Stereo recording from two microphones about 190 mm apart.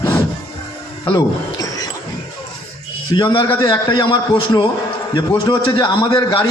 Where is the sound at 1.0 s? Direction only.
20° left (ahead or behind).